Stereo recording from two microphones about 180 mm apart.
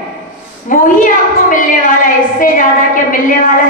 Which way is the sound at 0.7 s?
45° left (ahead or behind).